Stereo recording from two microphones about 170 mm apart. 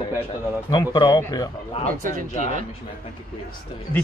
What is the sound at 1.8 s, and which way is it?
Speech, 50° right (ahead or behind).